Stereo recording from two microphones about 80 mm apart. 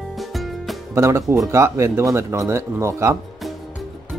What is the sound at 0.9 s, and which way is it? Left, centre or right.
Speech, right.